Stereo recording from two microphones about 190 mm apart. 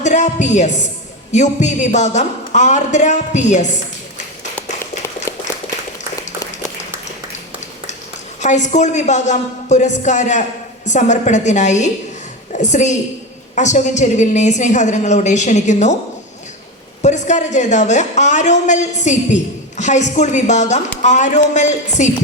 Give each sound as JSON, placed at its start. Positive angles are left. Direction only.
{"t": 0.0, "sound": "a woman's voice", "side_deg": 40}
{"t": 4.5, "sound": "a sound", "side_deg": 10}
{"t": 8.4, "sound": "a woman's voice", "side_deg": 40}
{"t": 17.0, "sound": "a woman's voice", "side_deg": 40}